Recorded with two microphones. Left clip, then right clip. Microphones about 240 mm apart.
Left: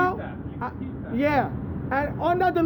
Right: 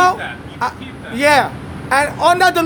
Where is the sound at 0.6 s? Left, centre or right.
Right.